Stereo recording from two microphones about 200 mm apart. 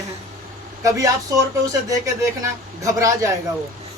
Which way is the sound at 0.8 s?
15° right (ahead or behind).